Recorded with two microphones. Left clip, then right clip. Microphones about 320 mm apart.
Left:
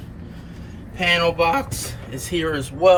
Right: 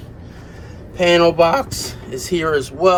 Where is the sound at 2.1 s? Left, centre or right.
Centre.